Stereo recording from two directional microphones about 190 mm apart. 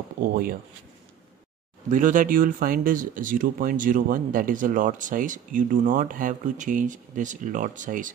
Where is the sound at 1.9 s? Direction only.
45° right (ahead or behind).